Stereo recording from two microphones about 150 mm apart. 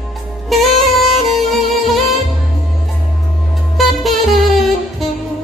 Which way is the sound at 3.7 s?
Centre (ahead or behind).